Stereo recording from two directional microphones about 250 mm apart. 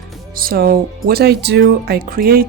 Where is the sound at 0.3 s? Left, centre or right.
Right.